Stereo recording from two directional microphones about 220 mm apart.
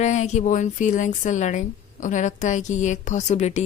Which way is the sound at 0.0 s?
30° left (ahead or behind).